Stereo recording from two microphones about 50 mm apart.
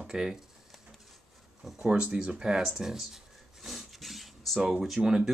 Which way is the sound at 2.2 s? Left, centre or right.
Centre.